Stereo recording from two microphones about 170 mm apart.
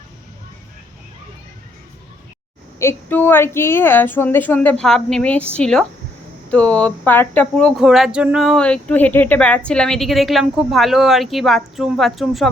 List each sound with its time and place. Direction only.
2.7 s a woman's voice: 15° left (ahead or behind)